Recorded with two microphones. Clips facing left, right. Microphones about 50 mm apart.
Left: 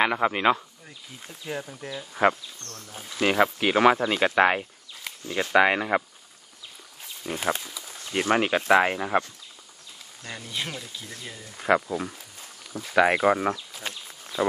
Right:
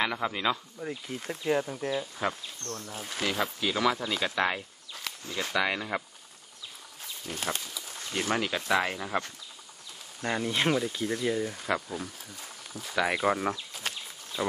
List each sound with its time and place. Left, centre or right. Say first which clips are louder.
0.0 s speech: left 7 dB; left
1.4 s speech: right 5 dB; centre
3.2 s speech: left 8 dB; left
7.2 s speech: left 6 dB; left
10.2 s speech: right 9 dB; right
10.5 s speech: right 5 dB; right
11.5 s speech: left 8 dB; left
13.2 s speech: left 5 dB; centre